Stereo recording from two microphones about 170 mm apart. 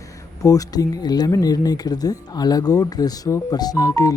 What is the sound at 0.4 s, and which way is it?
Speech, 20° left (ahead or behind).